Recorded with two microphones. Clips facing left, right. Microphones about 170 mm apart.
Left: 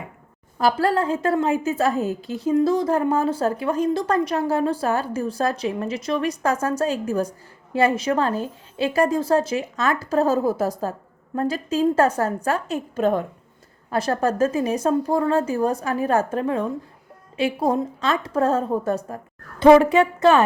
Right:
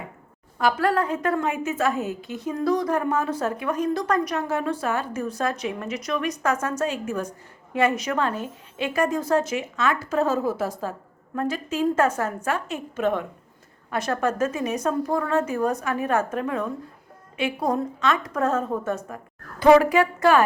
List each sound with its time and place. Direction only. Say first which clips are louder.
0.6 s a woman's voice: left 2 dB; 30° left (ahead or behind)